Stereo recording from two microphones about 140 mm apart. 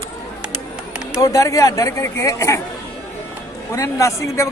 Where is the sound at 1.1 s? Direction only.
25° left (ahead or behind).